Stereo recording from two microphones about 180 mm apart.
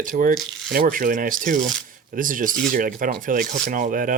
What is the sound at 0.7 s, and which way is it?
Speech, 50° right (ahead or behind).